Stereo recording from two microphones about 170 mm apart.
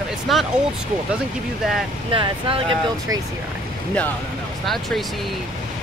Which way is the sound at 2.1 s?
30° right (ahead or behind).